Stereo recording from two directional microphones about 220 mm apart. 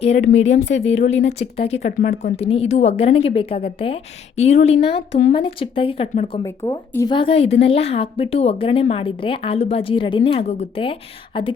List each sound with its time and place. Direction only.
0.0 s speech: 30° left (ahead or behind)
0.3 s speech: 55° left (ahead or behind)
1.3 s speech: 30° left (ahead or behind)
6.6 s speech: 10° left (ahead or behind)